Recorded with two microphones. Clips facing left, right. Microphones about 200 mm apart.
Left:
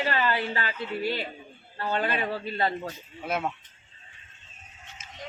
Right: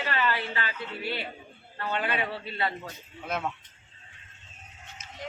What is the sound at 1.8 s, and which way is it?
Speech, 40° left (ahead or behind).